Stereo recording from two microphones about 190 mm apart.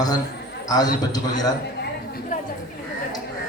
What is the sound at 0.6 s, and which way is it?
Speech, 20° left (ahead or behind).